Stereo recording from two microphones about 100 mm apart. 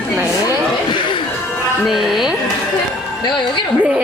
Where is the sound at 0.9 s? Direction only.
55° left (ahead or behind).